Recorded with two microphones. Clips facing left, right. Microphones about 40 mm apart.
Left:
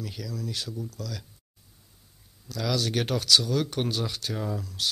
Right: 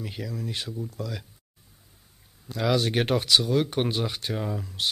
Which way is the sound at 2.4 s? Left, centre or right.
Right.